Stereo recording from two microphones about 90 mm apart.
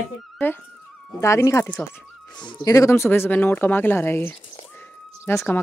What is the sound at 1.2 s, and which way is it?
Speech, 35° left (ahead or behind).